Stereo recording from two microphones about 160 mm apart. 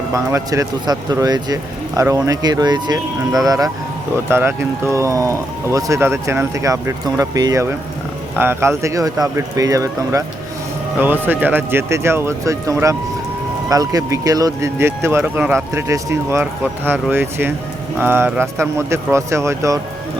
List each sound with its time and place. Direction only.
0.1 s speech: 20° right (ahead or behind)